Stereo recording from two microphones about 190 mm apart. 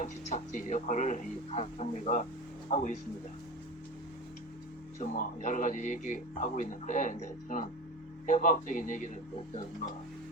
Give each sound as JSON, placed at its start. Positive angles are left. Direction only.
{"t": 0.0, "sound": "speech", "side_deg": 40}
{"t": 4.9, "sound": "speech", "side_deg": 45}